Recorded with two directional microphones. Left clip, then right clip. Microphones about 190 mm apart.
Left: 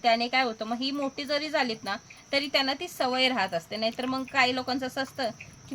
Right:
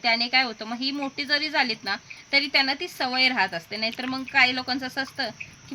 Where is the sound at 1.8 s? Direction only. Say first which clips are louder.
Right 4 dB; 20° left (ahead or behind).